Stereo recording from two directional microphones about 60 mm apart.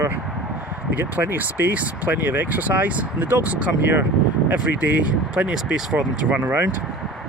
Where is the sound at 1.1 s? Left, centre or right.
Right.